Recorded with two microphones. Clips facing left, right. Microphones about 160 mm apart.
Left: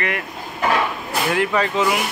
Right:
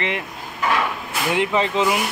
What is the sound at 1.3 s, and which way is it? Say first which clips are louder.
Speech: right 1 dB; 25° right (ahead or behind).